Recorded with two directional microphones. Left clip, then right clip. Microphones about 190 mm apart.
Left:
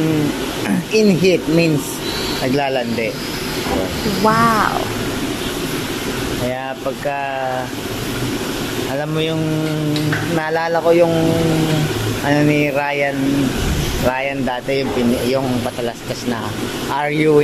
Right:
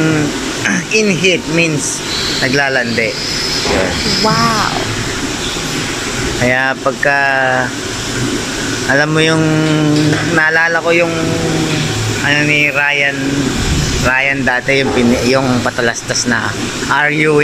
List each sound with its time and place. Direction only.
0.7 s speech: 20° left (ahead or behind)
4.2 s speech: centre (ahead or behind)
6.5 s speech: 5° left (ahead or behind)
8.9 s speech: centre (ahead or behind)
10.3 s speech: 15° left (ahead or behind)
12.3 s a sound: 25° left (ahead or behind)
14.4 s speech: 10° left (ahead or behind)